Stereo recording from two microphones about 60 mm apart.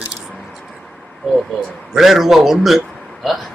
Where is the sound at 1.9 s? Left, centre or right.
Centre.